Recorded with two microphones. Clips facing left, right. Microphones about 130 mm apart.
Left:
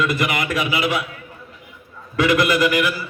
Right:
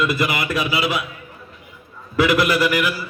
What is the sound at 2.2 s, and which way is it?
Music, 10° right (ahead or behind).